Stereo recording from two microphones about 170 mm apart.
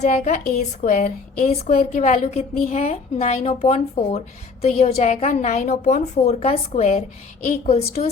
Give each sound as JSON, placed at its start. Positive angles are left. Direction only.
{"t": 0.0, "sound": "a woman's voice", "side_deg": 50}